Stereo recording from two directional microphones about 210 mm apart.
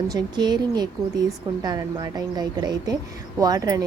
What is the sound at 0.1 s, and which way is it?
A woman's voice, 20° right (ahead or behind).